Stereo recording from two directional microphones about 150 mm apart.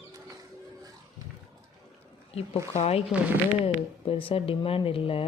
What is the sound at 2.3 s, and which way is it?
Speech, 40° left (ahead or behind).